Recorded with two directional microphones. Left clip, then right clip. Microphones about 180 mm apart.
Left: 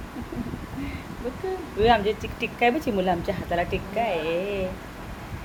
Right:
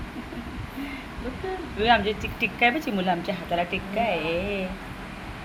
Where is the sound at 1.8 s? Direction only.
25° left (ahead or behind).